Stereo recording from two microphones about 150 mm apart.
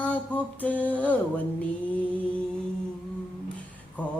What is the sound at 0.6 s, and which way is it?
Mantra, 10° left (ahead or behind).